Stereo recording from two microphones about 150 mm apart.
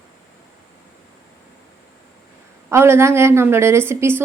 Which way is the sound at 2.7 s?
15° right (ahead or behind).